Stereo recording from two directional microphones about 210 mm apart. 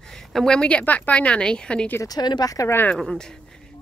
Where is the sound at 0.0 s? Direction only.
Centre (ahead or behind).